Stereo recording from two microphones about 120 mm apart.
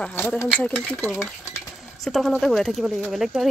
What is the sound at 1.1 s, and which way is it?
Stir, 25° left (ahead or behind).